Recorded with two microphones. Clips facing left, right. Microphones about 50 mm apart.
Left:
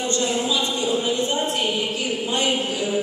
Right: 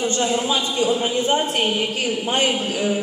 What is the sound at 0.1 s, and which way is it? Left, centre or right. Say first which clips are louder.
Speech: right 2 dB; right.